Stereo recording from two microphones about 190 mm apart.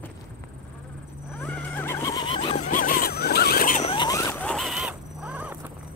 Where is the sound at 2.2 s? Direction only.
30° left (ahead or behind).